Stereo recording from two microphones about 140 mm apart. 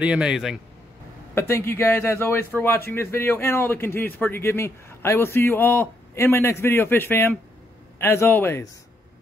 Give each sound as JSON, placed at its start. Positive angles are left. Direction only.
{"t": 0.0, "sound": "a man's voice", "side_deg": -5}
{"t": 1.3, "sound": "a man's voice", "side_deg": 15}